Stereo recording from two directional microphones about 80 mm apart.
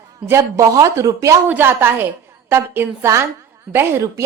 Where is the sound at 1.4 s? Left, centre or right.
Right.